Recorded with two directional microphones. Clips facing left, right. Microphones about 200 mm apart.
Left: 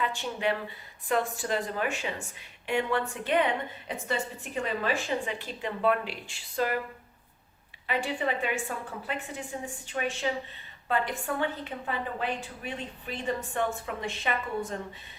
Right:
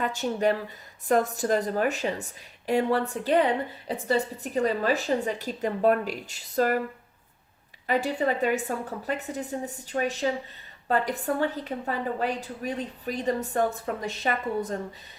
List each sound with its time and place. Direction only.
0.0 s a woman's voice: 40° right (ahead or behind)
7.9 s a woman's voice: 40° right (ahead or behind)